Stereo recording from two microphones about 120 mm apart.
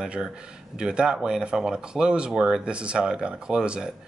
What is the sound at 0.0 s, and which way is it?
Speech, 5° right (ahead or behind).